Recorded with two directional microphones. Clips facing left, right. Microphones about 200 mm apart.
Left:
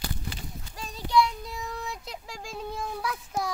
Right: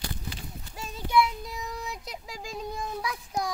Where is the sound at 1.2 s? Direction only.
Centre (ahead or behind).